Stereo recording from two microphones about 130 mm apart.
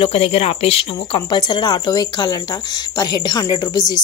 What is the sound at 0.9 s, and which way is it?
Speech, 35° left (ahead or behind).